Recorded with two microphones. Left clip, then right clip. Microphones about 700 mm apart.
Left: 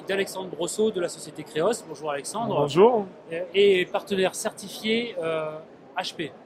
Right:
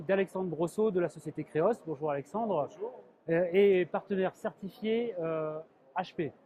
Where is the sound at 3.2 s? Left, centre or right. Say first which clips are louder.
Left 3 dB; right.